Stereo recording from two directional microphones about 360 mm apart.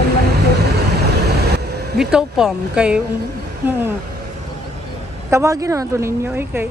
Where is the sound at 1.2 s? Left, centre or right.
Right.